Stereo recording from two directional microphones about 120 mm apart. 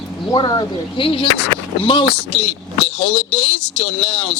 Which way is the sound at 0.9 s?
45° left (ahead or behind).